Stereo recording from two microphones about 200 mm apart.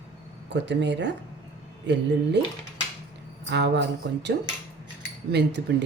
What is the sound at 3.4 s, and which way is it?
Speech, 60° right (ahead or behind).